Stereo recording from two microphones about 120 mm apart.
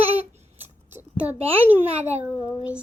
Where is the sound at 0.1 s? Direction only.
15° right (ahead or behind).